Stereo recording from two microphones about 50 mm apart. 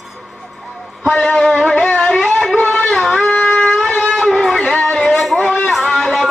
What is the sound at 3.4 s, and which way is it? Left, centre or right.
Wind instrument, centre.